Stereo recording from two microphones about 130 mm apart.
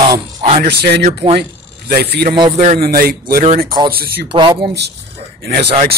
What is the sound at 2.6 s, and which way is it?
Speech, 60° right (ahead or behind).